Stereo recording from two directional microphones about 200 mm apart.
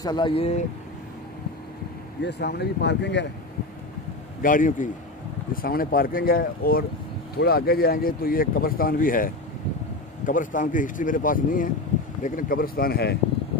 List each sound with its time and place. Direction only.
0.0 s speech: 20° left (ahead or behind)
2.2 s speech: 55° left (ahead or behind)
4.4 s speech: 40° left (ahead or behind)